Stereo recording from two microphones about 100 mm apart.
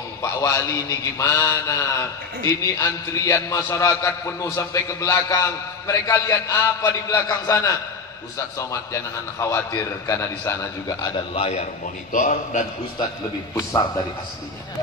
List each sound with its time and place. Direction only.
0.2 s a man's voice: 30° left (ahead or behind)
6.8 s a man's voice: 45° left (ahead or behind)
11.0 s a man's voice: 50° left (ahead or behind)
11.3 s a man's voice: 90° left
13.6 s a man's voice: 35° left (ahead or behind)